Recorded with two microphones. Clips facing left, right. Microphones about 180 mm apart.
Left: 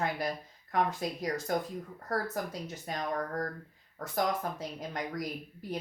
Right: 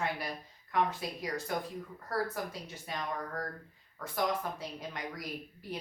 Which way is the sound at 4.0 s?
40° left (ahead or behind).